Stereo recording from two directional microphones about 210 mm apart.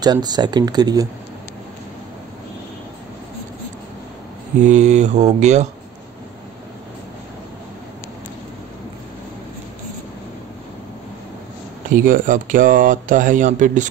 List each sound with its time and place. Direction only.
0.0 s speech: 20° right (ahead or behind)
4.6 s speech: 35° right (ahead or behind)
11.9 s speech: 40° right (ahead or behind)